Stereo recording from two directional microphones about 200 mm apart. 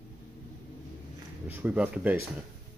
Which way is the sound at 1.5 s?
10° right (ahead or behind).